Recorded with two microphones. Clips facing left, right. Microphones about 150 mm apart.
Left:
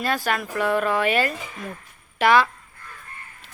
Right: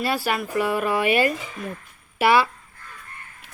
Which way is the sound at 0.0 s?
10° right (ahead or behind).